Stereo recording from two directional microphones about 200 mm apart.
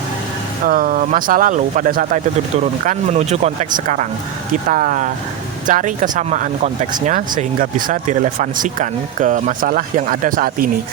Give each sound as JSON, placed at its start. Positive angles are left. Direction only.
{"t": 0.7, "sound": "speech", "side_deg": -45}